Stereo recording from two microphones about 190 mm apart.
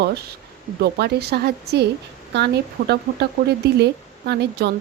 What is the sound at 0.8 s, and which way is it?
Speech, 60° right (ahead or behind).